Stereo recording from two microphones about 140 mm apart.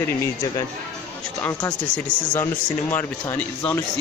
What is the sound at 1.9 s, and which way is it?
Speech, 15° left (ahead or behind).